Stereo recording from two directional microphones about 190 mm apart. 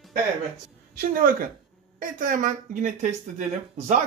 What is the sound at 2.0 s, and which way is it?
Speech, 45° right (ahead or behind).